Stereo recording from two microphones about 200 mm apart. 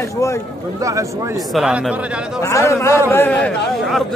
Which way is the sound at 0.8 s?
15° right (ahead or behind).